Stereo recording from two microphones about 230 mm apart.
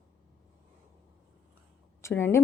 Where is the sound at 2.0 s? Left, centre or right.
Centre.